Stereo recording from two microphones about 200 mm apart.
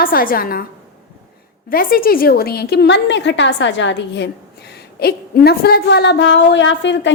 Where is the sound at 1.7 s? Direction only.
45° left (ahead or behind).